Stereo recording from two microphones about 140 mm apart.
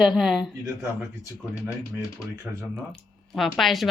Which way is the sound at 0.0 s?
Centre (ahead or behind).